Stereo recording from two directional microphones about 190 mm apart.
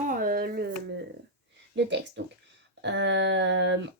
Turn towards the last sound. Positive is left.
turn(degrees=-70)  # may be behind; listen again after turning